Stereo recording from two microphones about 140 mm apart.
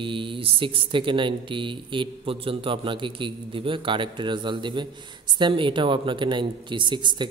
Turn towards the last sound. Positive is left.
turn(degrees=-35)  # may be behind; listen again after turning